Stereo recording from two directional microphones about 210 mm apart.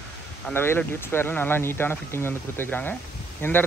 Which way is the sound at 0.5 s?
10° left (ahead or behind).